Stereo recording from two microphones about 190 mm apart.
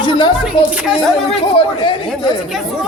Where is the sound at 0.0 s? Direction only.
25° left (ahead or behind).